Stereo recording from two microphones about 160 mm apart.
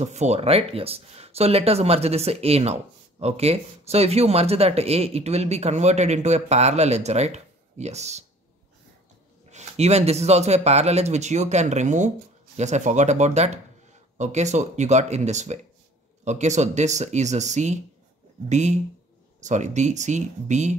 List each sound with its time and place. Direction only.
0.0 s speech: 45° right (ahead or behind)
9.5 s speech: 45° right (ahead or behind)